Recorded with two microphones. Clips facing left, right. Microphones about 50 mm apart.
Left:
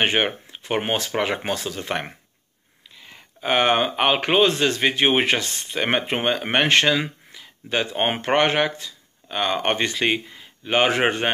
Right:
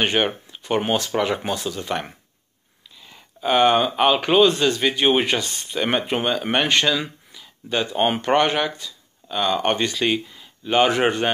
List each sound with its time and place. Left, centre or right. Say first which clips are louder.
0.0 s speech: even; left